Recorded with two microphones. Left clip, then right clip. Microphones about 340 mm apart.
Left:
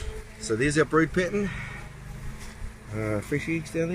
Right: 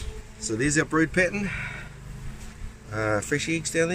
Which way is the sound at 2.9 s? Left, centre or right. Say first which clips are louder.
Right 4 dB; right.